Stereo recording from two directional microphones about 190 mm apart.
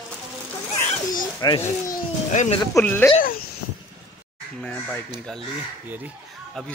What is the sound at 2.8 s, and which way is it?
Speech, 10° left (ahead or behind).